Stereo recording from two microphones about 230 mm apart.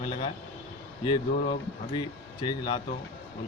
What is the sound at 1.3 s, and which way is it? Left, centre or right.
Speech, left.